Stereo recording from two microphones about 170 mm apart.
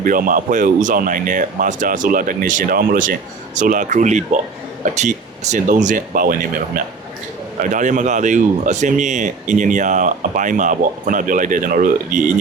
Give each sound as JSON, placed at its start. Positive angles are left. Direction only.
{"t": 0.0, "sound": "speech", "side_deg": -55}